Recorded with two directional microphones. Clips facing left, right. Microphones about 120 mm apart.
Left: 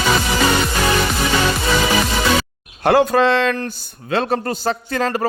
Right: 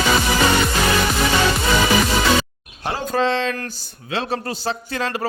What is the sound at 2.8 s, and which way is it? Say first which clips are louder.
Speech: left 7 dB; 70° left (ahead or behind).